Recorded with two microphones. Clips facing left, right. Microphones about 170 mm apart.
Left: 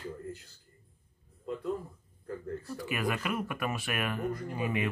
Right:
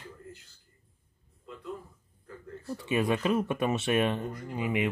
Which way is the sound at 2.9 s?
25° right (ahead or behind).